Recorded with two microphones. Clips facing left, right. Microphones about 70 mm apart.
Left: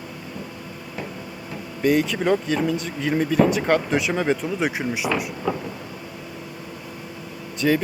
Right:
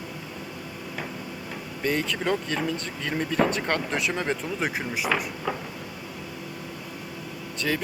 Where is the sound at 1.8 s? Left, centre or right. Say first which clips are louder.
Left 7 dB; centre.